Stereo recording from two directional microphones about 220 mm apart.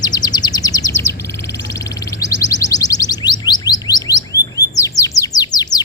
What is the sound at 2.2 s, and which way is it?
Music, 15° left (ahead or behind).